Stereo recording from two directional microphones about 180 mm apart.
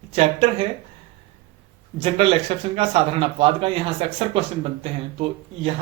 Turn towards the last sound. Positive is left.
turn(degrees=-35)  # may be behind; listen again after turning